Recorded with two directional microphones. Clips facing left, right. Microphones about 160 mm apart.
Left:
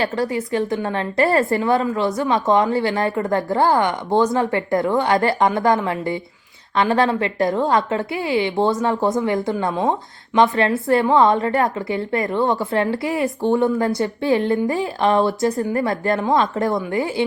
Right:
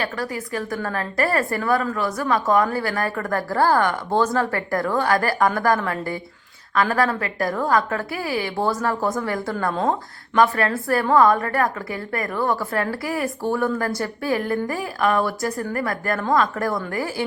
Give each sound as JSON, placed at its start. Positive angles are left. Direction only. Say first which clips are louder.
{"t": 0.0, "sound": "a woman's voice", "louder": "left 6 dB", "side_deg": 25}